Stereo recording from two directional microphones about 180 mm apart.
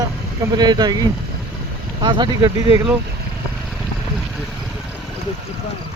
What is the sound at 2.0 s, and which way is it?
Speech, 25° right (ahead or behind).